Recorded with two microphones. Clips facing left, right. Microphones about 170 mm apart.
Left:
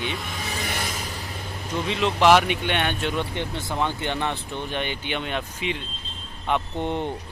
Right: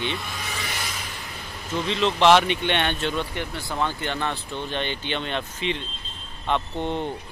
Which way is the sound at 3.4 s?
20° left (ahead or behind).